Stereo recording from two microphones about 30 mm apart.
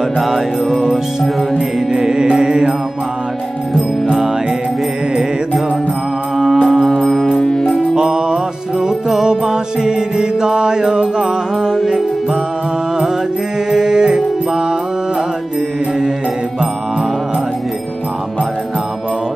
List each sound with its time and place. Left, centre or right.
1.9 s music: right
2.2 s mantra: right
6.3 s music: centre
7.3 s music: left
7.9 s music: right
13.7 s music: centre